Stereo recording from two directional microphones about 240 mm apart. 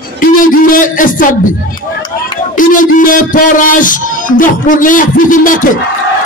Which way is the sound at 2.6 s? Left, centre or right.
Left.